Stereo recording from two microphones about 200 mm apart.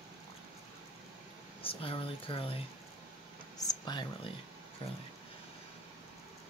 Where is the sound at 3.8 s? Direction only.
20° left (ahead or behind).